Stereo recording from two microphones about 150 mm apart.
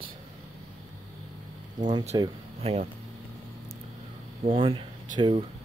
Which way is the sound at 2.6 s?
45° right (ahead or behind).